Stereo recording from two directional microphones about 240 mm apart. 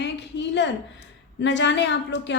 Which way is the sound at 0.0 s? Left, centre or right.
Left.